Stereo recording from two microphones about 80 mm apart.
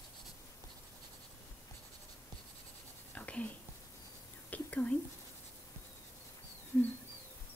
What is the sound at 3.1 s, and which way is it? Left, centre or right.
Whispering, centre.